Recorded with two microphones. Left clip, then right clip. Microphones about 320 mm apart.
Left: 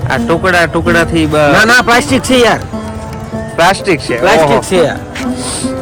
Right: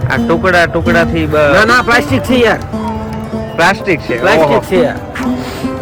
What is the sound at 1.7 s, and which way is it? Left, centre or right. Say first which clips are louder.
Speech: left 2 dB; left.